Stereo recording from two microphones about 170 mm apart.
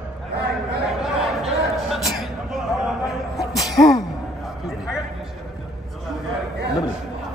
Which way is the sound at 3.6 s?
20° left (ahead or behind).